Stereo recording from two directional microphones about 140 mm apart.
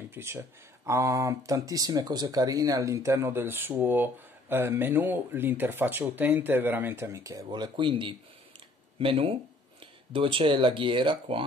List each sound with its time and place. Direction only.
0.1 s speech: 20° right (ahead or behind)
7.4 s speech: 35° right (ahead or behind)